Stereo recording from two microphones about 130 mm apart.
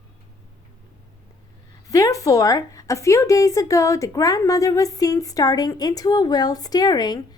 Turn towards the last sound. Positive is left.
turn(degrees=30)  # may be behind; listen again after turning